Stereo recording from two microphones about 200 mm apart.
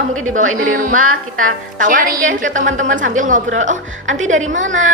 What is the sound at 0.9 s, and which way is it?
Speech, 90° right.